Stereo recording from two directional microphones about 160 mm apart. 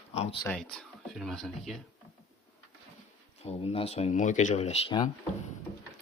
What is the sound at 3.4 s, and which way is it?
Speech, 40° left (ahead or behind).